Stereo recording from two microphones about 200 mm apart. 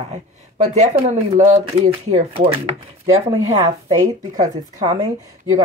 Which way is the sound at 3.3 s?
20° right (ahead or behind).